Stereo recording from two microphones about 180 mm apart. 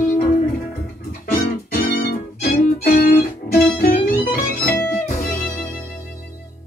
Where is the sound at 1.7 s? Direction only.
55° left (ahead or behind).